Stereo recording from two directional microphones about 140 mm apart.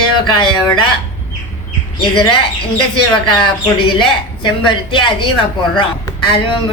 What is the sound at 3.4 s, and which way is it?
A woman's voice, 35° left (ahead or behind).